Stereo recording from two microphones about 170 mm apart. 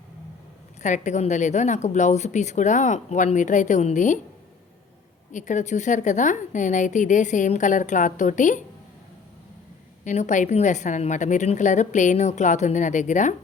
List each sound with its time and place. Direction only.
0.8 s a woman's voice: 45° left (ahead or behind)
5.3 s a woman's voice: 45° left (ahead or behind)
10.0 s a woman's voice: 45° left (ahead or behind)